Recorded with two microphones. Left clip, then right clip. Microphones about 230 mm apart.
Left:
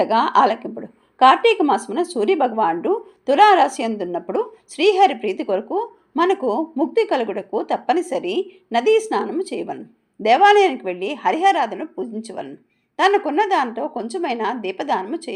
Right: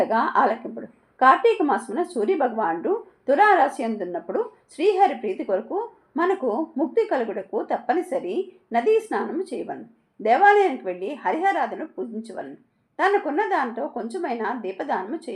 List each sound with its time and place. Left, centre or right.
0.0 s a woman's voice: left